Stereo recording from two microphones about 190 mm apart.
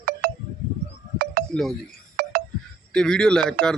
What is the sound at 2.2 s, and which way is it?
Music, 55° right (ahead or behind).